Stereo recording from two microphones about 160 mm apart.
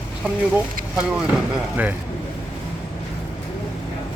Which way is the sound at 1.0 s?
5° right (ahead or behind).